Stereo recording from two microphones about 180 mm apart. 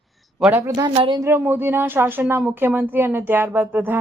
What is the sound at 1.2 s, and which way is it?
Speech, 10° right (ahead or behind).